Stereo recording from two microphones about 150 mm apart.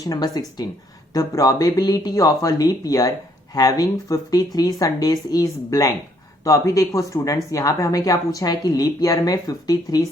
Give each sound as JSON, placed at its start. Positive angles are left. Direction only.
{"t": 0.1, "sound": "a woman's voice", "side_deg": 25}